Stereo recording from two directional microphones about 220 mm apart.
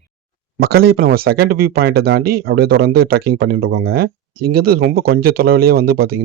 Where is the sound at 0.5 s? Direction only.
45° right (ahead or behind).